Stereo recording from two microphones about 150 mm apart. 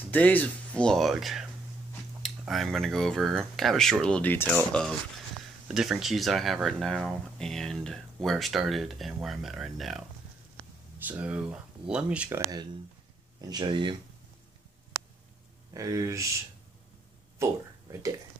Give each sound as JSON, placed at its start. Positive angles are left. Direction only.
{"t": 0.1, "sound": "speech", "side_deg": 10}
{"t": 5.7, "sound": "speech", "side_deg": -5}
{"t": 11.1, "sound": "speech", "side_deg": -10}
{"t": 12.4, "sound": "speech", "side_deg": -25}
{"t": 15.7, "sound": "speech", "side_deg": -20}
{"t": 17.4, "sound": "speech", "side_deg": -20}